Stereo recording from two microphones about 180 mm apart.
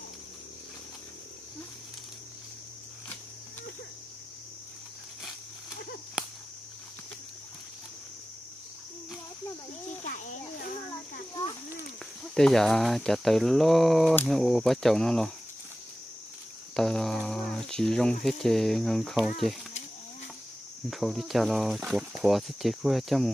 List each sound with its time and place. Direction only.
10.0 s children playing: 45° left (ahead or behind)
12.4 s speech: centre (ahead or behind)
16.7 s a sound: 5° left (ahead or behind)
18.4 s speech: centre (ahead or behind)
20.9 s speech: centre (ahead or behind)